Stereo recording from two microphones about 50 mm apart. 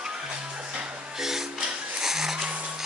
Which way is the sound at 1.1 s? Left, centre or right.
Centre.